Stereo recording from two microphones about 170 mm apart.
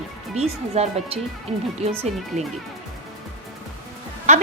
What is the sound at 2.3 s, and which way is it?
Speech, 45° right (ahead or behind).